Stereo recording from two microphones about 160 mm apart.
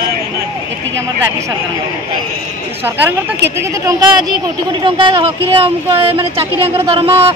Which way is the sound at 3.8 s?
30° right (ahead or behind).